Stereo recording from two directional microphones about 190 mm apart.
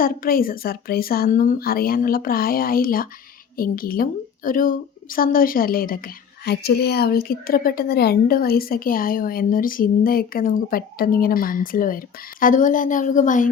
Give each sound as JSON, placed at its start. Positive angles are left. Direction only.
{"t": 0.0, "sound": "a woman's voice", "side_deg": 50}